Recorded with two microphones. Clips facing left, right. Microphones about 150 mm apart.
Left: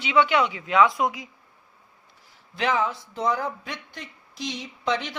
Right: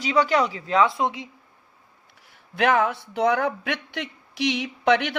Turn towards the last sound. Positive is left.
turn(degrees=-65)  # may be behind; listen again after turning